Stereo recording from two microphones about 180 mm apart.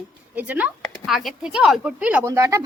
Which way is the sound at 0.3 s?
10° right (ahead or behind).